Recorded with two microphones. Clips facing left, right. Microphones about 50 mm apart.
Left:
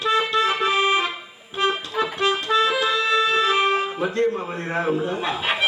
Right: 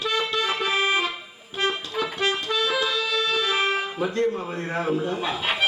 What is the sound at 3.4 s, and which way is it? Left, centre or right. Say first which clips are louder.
Speech: left 4 dB; centre.